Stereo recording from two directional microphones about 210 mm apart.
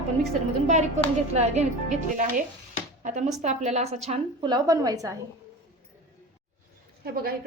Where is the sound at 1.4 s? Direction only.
30° right (ahead or behind).